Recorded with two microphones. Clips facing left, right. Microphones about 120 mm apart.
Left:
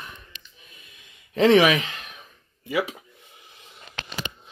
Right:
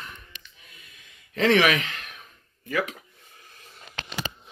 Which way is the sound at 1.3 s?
15° left (ahead or behind).